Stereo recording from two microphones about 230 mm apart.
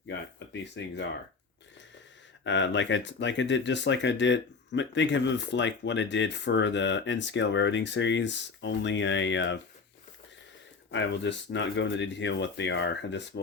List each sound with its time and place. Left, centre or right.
0.3 s speech: left
2.4 s speech: left
10.9 s speech: left